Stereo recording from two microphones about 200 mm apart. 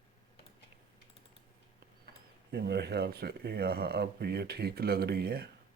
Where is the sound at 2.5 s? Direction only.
55° right (ahead or behind).